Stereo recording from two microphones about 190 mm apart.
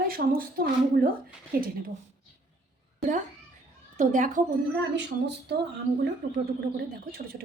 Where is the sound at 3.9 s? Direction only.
40° right (ahead or behind).